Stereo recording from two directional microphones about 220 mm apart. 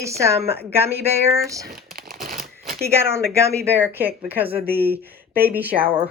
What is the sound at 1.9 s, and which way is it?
Shuffling cards, 40° right (ahead or behind).